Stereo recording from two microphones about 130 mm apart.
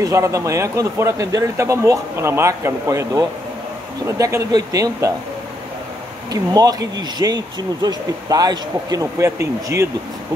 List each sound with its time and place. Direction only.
0.0 s speech: 25° right (ahead or behind)
6.3 s speech: 30° right (ahead or behind)